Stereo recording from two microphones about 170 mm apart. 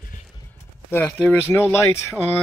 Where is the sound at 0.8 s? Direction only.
10° left (ahead or behind).